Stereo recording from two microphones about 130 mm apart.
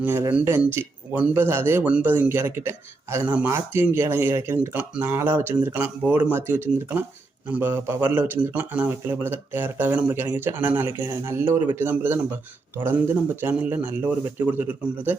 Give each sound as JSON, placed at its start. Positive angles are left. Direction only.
{"t": 0.0, "sound": "speech", "side_deg": -15}